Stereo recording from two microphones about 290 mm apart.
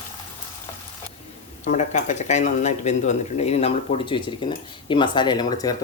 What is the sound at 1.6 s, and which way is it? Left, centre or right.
Speech, left.